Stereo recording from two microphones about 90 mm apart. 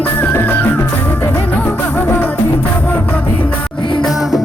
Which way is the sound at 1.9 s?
20° left (ahead or behind).